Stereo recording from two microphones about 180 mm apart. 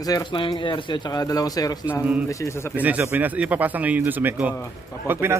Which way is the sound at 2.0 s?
5° right (ahead or behind).